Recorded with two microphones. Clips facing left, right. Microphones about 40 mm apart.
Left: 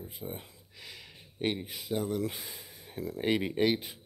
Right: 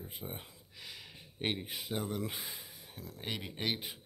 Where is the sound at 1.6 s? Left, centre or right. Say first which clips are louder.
Left 5 dB; centre.